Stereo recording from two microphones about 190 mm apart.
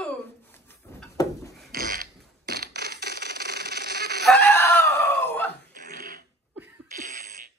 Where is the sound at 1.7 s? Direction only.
50° right (ahead or behind).